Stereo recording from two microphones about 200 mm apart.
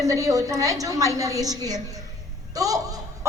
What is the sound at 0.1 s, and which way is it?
A woman's voice, 15° right (ahead or behind).